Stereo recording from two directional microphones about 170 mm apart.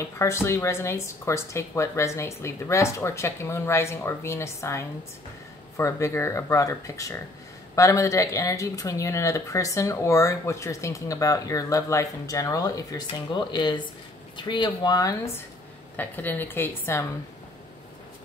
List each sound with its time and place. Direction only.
0.2 s speech: 15° left (ahead or behind)
16.0 s speech: 10° left (ahead or behind)